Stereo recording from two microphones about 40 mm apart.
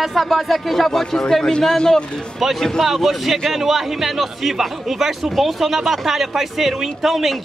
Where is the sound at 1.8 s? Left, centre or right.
Left.